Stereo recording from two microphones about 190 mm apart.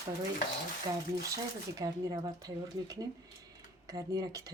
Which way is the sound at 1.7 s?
20° right (ahead or behind).